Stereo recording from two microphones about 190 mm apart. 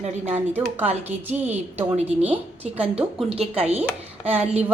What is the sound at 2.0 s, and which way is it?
Speech, 35° right (ahead or behind).